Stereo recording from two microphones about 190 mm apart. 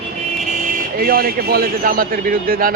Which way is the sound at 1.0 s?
50° right (ahead or behind).